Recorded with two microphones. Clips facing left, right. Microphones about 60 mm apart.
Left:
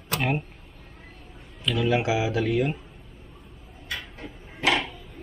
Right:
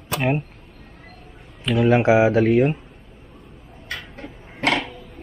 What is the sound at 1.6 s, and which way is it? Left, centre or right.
Speech, right.